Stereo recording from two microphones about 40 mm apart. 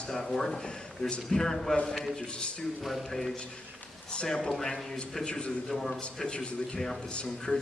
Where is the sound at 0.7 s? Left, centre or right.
Left.